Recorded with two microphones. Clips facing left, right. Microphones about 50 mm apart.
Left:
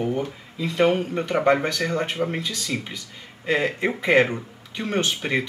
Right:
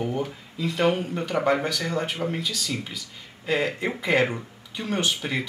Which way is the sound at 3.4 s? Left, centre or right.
Left.